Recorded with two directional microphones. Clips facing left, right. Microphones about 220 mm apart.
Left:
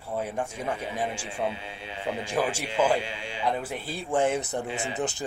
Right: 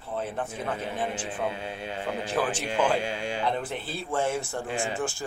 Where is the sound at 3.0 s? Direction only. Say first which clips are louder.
Right 5 dB; 45° right (ahead or behind).